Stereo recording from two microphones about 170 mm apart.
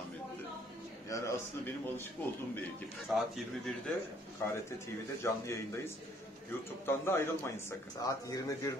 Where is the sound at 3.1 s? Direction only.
5° right (ahead or behind).